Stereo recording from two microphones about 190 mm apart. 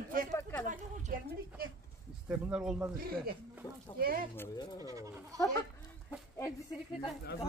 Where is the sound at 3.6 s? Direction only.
20° left (ahead or behind).